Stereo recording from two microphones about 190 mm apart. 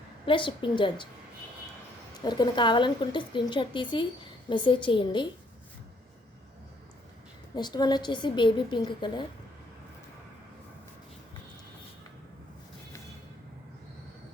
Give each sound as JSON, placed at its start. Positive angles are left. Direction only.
{"t": 0.3, "sound": "speech", "side_deg": 25}
{"t": 2.2, "sound": "speech", "side_deg": 20}
{"t": 7.5, "sound": "speech", "side_deg": 20}